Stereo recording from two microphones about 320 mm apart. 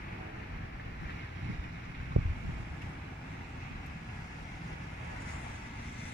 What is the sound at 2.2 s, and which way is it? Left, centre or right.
Boat, right.